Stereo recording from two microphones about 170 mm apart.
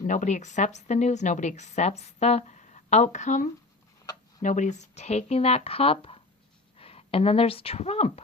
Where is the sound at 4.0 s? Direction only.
20° left (ahead or behind).